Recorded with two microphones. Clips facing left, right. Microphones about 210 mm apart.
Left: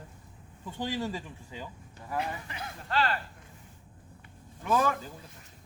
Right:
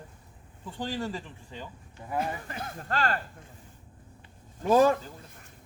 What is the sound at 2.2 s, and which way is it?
Speech, 45° right (ahead or behind).